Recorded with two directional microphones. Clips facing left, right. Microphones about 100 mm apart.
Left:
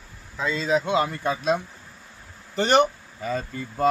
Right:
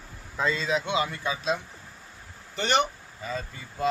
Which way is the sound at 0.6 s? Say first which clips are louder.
Left 9 dB; 40° left (ahead or behind).